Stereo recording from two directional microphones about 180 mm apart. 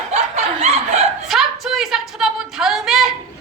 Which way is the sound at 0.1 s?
35° right (ahead or behind).